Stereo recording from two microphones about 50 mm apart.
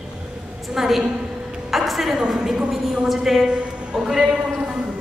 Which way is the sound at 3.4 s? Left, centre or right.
Right.